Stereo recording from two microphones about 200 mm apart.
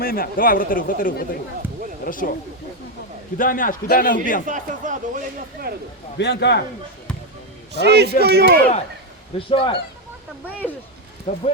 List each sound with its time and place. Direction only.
0.0 s speech: 45° left (ahead or behind)
3.3 s speech: 45° left (ahead or behind)
4.4 s speech: 40° right (ahead or behind)
6.1 s a man's voice: 60° left (ahead or behind)
7.7 s a man's voice: 55° right (ahead or behind)
9.5 s speech: 25° left (ahead or behind)
11.3 s speech: 35° left (ahead or behind)